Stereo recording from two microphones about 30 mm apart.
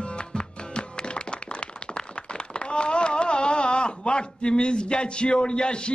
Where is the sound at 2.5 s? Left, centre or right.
Left.